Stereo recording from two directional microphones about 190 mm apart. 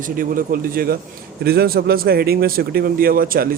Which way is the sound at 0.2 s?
50° right (ahead or behind).